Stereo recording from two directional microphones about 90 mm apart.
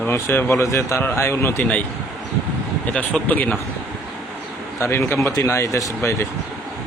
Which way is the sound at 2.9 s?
15° left (ahead or behind).